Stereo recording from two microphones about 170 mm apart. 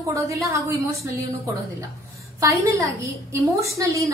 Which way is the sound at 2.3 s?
20° right (ahead or behind).